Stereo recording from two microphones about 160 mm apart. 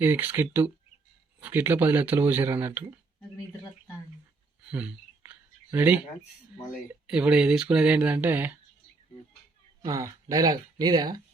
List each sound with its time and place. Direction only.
0.0 s speech: 10° right (ahead or behind)
4.6 s a sound: 5° right (ahead or behind)
7.1 s speech: 5° right (ahead or behind)
9.8 s speech: 20° right (ahead or behind)